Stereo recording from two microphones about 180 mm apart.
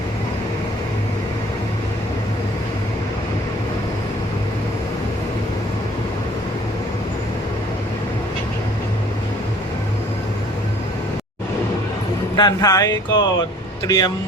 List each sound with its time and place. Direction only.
12.4 s speech: 20° left (ahead or behind)